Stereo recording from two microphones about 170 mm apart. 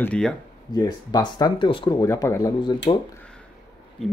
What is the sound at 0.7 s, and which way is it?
Speech, 25° left (ahead or behind).